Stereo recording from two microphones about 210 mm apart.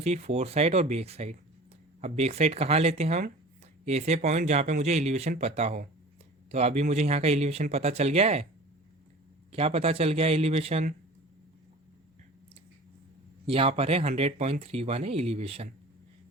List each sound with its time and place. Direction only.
0.0 s speech: 30° right (ahead or behind)
9.5 s speech: 30° right (ahead or behind)
13.5 s speech: 25° right (ahead or behind)